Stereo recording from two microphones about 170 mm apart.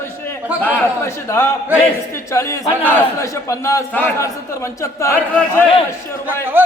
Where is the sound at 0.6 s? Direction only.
10° left (ahead or behind).